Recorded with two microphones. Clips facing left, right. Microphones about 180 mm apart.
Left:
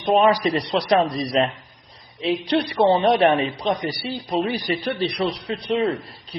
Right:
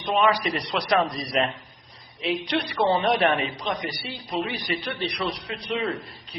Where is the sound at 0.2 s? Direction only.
35° left (ahead or behind).